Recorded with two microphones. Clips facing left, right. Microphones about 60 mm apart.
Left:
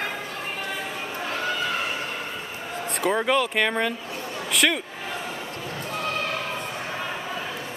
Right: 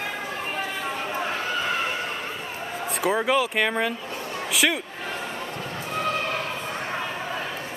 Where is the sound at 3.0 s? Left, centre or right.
Centre.